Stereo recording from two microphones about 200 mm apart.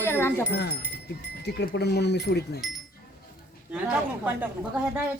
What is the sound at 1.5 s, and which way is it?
Speech, 55° left (ahead or behind).